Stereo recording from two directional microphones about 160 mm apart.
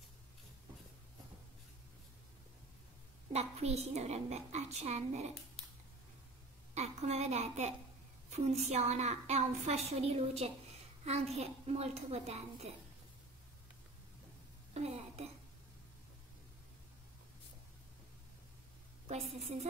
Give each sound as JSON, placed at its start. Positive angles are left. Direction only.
{"t": 3.3, "sound": "a woman's voice", "side_deg": -40}
{"t": 6.7, "sound": "a woman's voice", "side_deg": -45}
{"t": 14.7, "sound": "a sound", "side_deg": -40}
{"t": 19.0, "sound": "a woman's voice", "side_deg": -40}